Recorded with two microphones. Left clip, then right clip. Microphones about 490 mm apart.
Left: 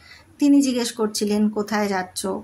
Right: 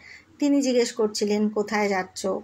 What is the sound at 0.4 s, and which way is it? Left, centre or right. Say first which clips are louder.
Speech: left 3 dB; left.